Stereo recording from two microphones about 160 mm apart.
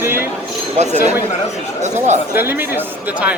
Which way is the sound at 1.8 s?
45° right (ahead or behind).